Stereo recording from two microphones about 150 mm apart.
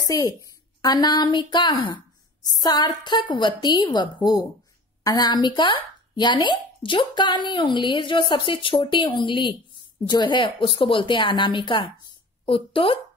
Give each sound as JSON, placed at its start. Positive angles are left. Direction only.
{"t": 0.0, "sound": "a woman's voice", "side_deg": 25}